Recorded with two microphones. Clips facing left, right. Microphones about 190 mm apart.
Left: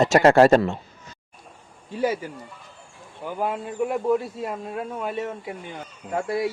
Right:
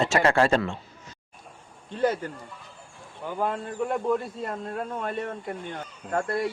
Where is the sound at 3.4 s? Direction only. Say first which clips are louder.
Left 2 dB; 10° left (ahead or behind).